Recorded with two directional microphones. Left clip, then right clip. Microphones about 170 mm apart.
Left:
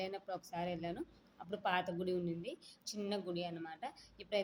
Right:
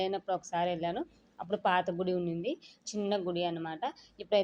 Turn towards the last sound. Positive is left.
turn(degrees=-25)  # may be behind; listen again after turning